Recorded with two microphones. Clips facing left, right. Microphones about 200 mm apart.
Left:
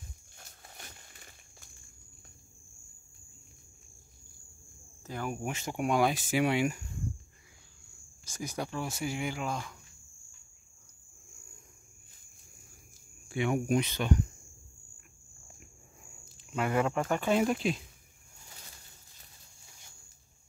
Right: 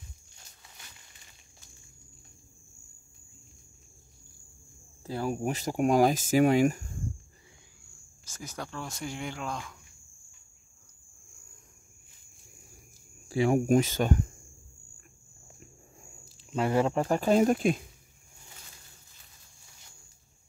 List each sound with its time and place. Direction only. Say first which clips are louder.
0.4 s a sound: left 6 dB; 50° left (ahead or behind)
5.0 s speech: right 5 dB; 30° right (ahead or behind)
8.3 s speech: left 4 dB; 15° left (ahead or behind)
13.3 s speech: right 5 dB; 35° right (ahead or behind)
16.5 s speech: right 3 dB; 30° right (ahead or behind); by 17.8 s 50° right (ahead or behind)